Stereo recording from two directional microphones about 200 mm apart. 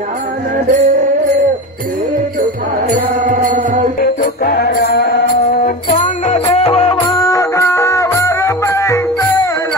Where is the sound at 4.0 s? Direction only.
50° left (ahead or behind).